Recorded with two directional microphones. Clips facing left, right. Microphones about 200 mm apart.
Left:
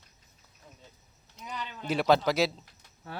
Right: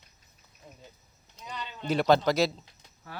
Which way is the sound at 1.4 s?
5° left (ahead or behind).